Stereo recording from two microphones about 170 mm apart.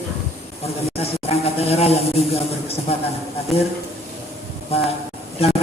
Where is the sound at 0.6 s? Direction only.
35° left (ahead or behind).